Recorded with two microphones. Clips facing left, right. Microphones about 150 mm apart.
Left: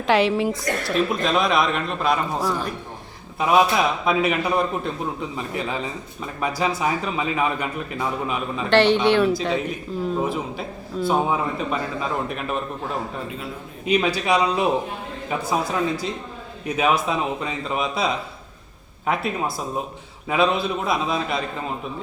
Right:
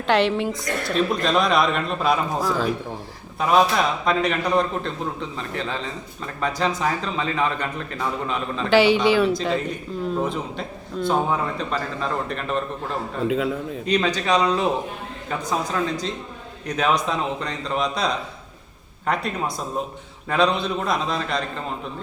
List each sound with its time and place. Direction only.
0.1 s a man's voice: centre (ahead or behind)
8.7 s a man's voice: 5° right (ahead or behind)
13.2 s a man's voice: 90° right
13.8 s a man's voice: 10° left (ahead or behind)